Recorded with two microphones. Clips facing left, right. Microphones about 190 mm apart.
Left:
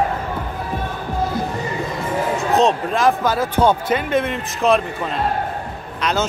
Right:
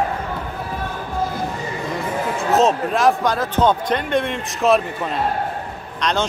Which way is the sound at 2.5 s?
Centre (ahead or behind).